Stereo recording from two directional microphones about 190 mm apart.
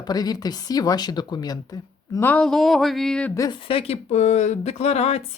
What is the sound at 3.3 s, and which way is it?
Speech, 20° left (ahead or behind).